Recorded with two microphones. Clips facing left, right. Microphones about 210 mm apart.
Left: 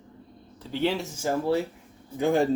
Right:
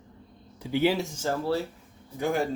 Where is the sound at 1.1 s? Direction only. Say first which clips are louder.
Left 3 dB; 15° left (ahead or behind).